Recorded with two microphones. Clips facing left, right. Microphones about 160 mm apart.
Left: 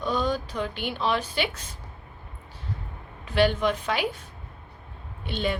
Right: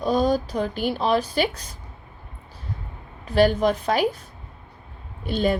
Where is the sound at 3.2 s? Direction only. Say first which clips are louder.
Right 4 dB; 40° right (ahead or behind).